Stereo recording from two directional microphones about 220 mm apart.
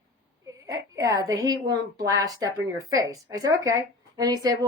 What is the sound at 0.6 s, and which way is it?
A woman's voice, 15° right (ahead or behind).